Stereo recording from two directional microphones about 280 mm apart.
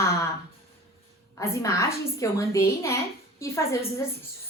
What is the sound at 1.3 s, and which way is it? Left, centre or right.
A woman's voice, centre.